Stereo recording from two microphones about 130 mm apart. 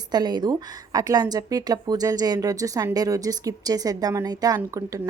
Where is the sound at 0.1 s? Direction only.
30° right (ahead or behind).